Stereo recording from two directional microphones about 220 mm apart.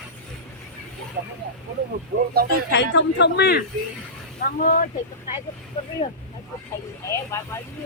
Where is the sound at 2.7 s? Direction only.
55° left (ahead or behind).